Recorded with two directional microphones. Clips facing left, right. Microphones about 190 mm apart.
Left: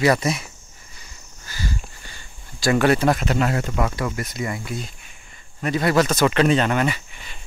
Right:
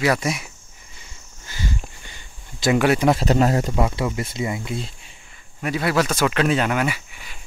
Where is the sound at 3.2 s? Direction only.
35° right (ahead or behind).